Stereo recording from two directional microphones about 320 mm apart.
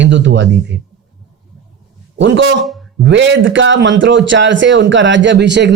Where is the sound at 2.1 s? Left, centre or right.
Right.